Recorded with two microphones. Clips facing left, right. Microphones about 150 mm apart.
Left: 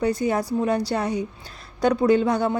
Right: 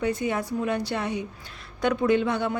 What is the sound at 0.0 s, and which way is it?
A woman's voice, 35° left (ahead or behind).